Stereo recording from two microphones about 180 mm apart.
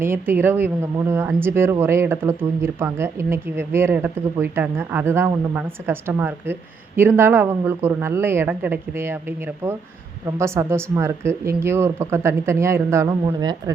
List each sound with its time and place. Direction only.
0.0 s speech: 10° right (ahead or behind)